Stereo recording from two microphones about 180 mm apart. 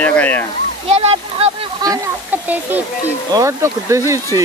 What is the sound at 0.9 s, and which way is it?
Speech, 35° right (ahead or behind).